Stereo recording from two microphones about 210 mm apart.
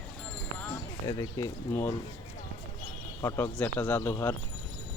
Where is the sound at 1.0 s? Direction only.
15° left (ahead or behind).